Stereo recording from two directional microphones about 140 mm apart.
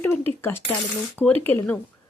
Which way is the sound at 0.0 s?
15° left (ahead or behind).